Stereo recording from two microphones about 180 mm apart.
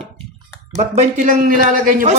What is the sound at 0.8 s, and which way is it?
Speech, 45° right (ahead or behind).